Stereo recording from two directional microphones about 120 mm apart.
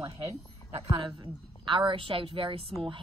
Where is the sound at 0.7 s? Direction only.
50° right (ahead or behind).